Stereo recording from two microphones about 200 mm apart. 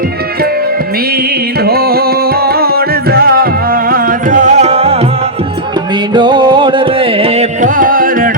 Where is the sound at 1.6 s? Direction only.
50° right (ahead or behind).